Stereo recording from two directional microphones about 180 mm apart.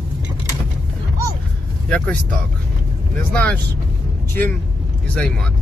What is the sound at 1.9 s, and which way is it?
Speech, 10° left (ahead or behind).